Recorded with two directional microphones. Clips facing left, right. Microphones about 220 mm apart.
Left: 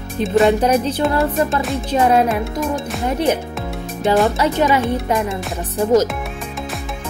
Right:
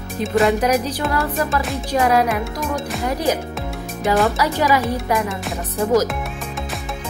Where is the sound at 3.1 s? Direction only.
25° left (ahead or behind).